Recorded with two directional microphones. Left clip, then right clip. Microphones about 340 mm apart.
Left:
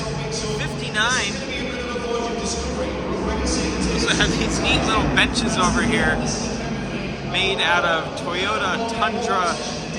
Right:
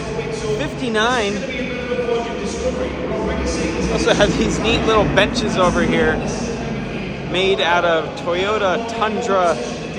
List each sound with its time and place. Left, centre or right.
0.9 s speech: centre
3.9 s speech: centre
7.4 s speech: centre